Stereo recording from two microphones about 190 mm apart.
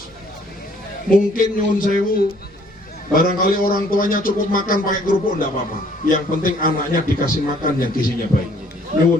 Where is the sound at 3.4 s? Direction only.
50° left (ahead or behind).